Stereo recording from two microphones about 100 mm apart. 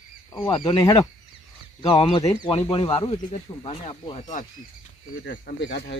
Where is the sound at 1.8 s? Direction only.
55° left (ahead or behind); by 4.2 s 75° left (ahead or behind).